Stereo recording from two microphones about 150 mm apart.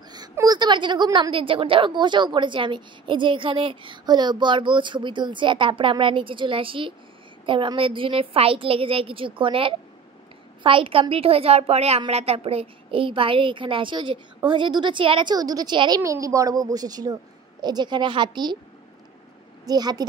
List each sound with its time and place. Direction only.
0.1 s a woman's voice: 25° right (ahead or behind)
19.6 s a woman's voice: 25° right (ahead or behind)